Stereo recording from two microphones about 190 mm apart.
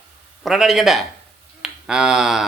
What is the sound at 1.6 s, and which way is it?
Finger snapping, 5° right (ahead or behind).